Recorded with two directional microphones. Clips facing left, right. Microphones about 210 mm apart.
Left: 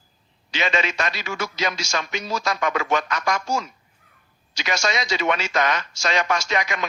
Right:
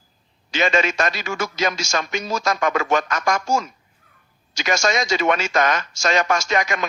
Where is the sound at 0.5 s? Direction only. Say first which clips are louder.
Right 4 dB; 45° right (ahead or behind).